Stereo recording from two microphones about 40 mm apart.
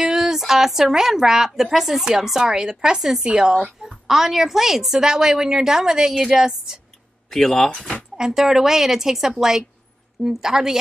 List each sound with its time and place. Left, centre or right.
0.0 s speech: centre
3.3 s speech: right
3.8 s speech: centre
7.2 s speech: centre
8.2 s speech: centre